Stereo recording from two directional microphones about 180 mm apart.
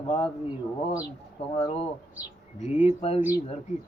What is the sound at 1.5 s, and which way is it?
Speech, 30° left (ahead or behind).